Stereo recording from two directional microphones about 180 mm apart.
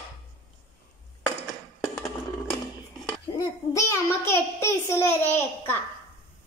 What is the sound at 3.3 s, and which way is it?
A child's voice, 15° left (ahead or behind).